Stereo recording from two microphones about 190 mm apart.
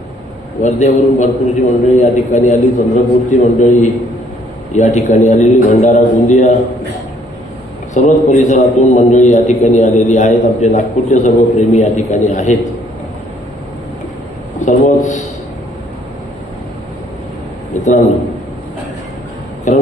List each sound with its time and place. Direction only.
0.6 s a man's voice: 40° left (ahead or behind)
7.9 s a man's voice: 40° left (ahead or behind)
14.6 s a man's voice: 40° left (ahead or behind)
19.7 s a man's voice: 40° left (ahead or behind)